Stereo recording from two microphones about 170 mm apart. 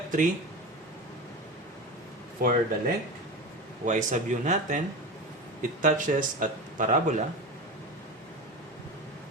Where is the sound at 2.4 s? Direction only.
65° right (ahead or behind).